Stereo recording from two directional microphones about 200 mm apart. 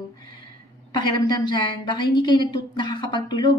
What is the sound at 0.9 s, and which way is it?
A woman's voice, 20° left (ahead or behind).